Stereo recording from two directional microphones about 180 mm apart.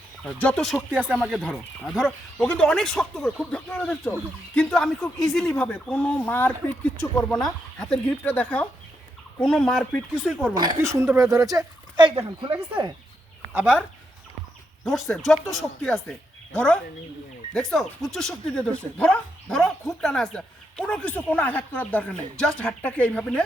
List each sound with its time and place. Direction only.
0.3 s speech: 5° left (ahead or behind)
0.9 s speech: 5° right (ahead or behind)
10.5 s speech: 25° right (ahead or behind)
13.5 s speech: 10° right (ahead or behind)
14.8 s speech: centre (ahead or behind)